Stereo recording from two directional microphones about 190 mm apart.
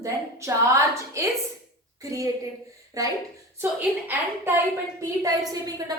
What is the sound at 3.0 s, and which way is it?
Speech, 15° right (ahead or behind).